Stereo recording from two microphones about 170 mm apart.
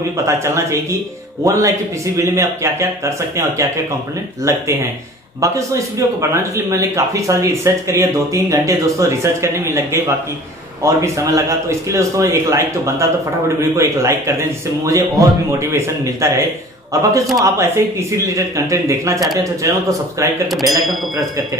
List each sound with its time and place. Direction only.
0.3 s speech: 15° right (ahead or behind)